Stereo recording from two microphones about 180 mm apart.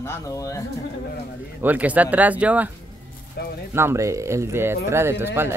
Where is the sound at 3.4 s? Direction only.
60° left (ahead or behind).